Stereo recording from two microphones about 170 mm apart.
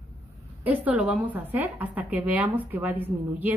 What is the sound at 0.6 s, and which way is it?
A woman's voice, 10° right (ahead or behind).